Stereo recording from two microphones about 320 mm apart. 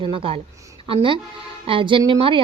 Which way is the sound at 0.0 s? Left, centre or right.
Centre.